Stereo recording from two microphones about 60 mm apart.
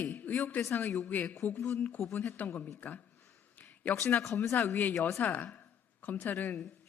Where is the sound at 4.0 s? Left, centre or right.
Left.